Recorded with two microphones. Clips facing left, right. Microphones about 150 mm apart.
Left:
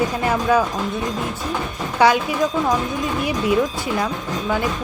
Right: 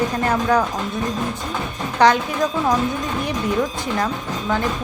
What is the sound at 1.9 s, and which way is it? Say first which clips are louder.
Speech: even; 10° left (ahead or behind).